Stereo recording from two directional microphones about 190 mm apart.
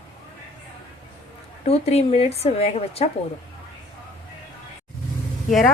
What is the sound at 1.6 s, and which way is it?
A woman's voice, 35° left (ahead or behind).